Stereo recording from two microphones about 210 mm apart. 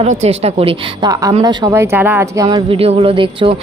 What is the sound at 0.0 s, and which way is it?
A woman's voice, 30° right (ahead or behind).